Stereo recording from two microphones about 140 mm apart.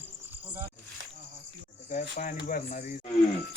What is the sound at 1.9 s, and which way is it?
Speech, 65° left (ahead or behind).